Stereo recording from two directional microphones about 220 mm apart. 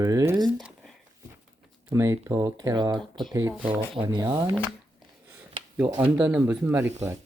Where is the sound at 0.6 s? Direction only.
Centre (ahead or behind).